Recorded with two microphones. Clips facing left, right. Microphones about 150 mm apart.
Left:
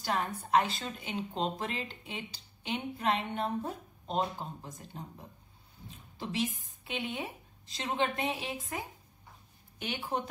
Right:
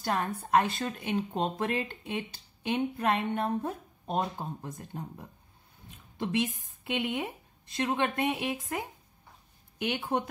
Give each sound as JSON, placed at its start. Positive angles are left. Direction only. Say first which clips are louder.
{"t": 0.0, "sound": "a woman's voice", "louder": "right 2 dB", "side_deg": -50}
{"t": 9.8, "sound": "a woman's voice", "louder": "right 4 dB", "side_deg": -60}